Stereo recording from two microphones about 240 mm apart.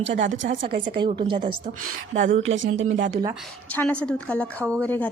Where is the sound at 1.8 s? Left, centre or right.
Right.